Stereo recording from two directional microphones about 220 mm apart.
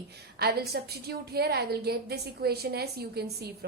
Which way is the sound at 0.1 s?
45° right (ahead or behind).